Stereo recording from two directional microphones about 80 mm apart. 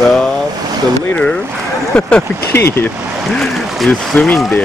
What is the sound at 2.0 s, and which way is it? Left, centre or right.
Speech, centre.